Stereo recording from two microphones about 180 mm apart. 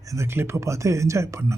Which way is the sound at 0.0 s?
15° right (ahead or behind).